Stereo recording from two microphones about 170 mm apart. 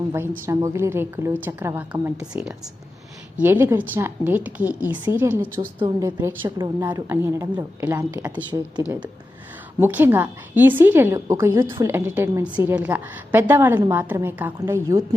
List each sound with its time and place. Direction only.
0.1 s a woman's voice: 15° right (ahead or behind)
9.8 s a woman's voice: 10° right (ahead or behind)